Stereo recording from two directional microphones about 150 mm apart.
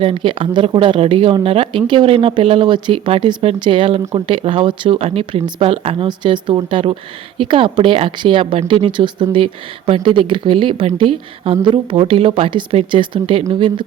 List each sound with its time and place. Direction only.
0.0 s speech: 35° right (ahead or behind)